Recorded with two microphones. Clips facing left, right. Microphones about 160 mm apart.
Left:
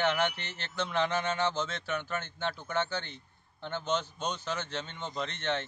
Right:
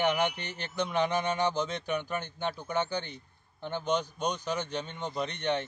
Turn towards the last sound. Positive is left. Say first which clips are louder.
# right 3 dB
turn(degrees=-15)  # may be behind; listen again after turning